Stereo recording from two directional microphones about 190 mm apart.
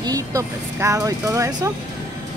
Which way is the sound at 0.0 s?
20° right (ahead or behind).